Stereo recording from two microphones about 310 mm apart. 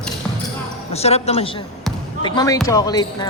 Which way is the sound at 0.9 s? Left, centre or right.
Centre.